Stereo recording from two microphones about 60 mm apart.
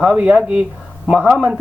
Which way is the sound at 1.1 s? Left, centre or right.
Centre.